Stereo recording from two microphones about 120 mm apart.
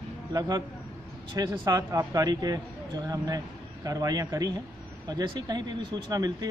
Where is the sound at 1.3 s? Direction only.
30° right (ahead or behind).